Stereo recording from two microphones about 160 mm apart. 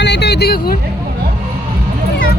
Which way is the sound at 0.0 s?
90° left.